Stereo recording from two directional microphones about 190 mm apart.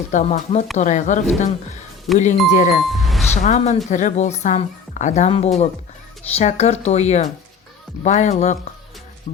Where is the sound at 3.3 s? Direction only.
40° left (ahead or behind).